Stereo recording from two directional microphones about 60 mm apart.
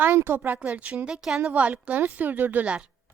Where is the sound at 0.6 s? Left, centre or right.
Right.